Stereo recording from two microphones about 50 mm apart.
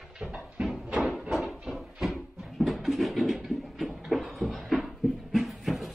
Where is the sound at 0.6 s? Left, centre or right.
Right.